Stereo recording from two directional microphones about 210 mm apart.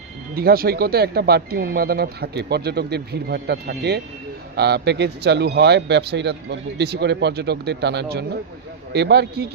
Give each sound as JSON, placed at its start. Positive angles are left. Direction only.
{"t": 0.3, "sound": "speech", "side_deg": -45}